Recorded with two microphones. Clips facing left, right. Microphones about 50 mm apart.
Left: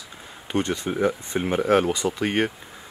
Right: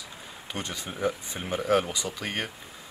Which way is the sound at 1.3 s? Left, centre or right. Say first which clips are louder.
Left 5 dB; left.